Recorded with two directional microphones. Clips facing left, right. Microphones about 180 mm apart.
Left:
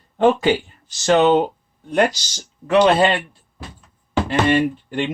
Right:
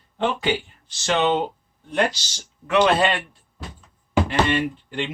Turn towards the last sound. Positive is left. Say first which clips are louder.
# left 5 dB
turn(degrees=45)  # may be behind; listen again after turning